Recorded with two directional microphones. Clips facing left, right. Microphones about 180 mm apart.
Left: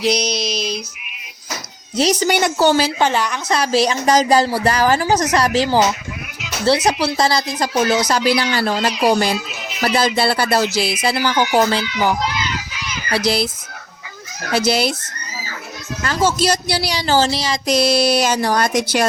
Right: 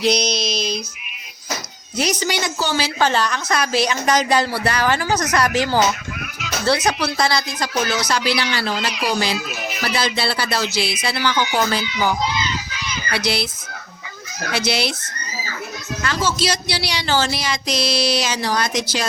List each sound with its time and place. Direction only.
0.0 s a sound: 5° left (ahead or behind)
2.2 s a woman's voice: 60° left (ahead or behind)
3.0 s a sound: 15° left (ahead or behind)
3.5 s speech: 35° left (ahead or behind)
7.2 s speech: 40° left (ahead or behind)
8.1 s speech: 45° left (ahead or behind)
8.7 s speech: 35° left (ahead or behind)
9.8 s speech: 50° left (ahead or behind)
11.8 s children playing: centre (ahead or behind)
13.1 s a sound: 40° left (ahead or behind)
14.5 s speech: 45° left (ahead or behind)
16.0 s speech: 50° left (ahead or behind); by 17.6 s 35° left (ahead or behind)
17.7 s speech: 50° left (ahead or behind)